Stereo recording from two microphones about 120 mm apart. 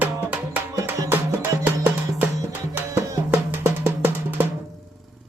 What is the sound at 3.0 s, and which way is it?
Music, 20° right (ahead or behind).